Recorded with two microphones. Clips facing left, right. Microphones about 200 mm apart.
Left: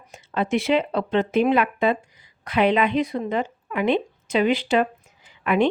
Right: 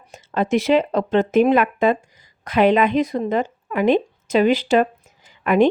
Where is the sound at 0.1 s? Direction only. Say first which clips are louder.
Right 3 dB; 40° right (ahead or behind).